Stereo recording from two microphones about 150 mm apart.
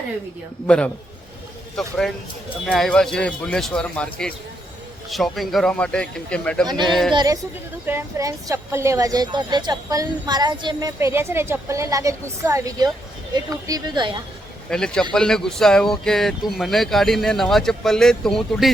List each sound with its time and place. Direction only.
1.8 s a man's voice: centre (ahead or behind)
7.1 s a woman's voice: 30° right (ahead or behind)
7.9 s a woman's voice: 20° right (ahead or behind)
14.7 s speech: 5° left (ahead or behind)